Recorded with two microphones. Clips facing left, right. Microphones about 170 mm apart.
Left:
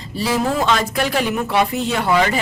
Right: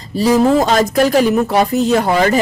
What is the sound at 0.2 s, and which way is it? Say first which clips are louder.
Speech: right 8 dB; 40° right (ahead or behind).